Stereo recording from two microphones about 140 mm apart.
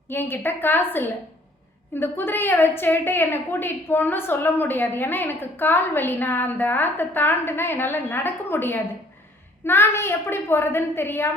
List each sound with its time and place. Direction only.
0.1 s a woman's voice: 15° left (ahead or behind)